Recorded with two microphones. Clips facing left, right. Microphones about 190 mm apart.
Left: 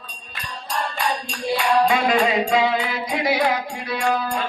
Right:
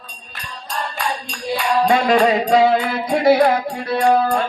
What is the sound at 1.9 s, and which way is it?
Music, 40° right (ahead or behind).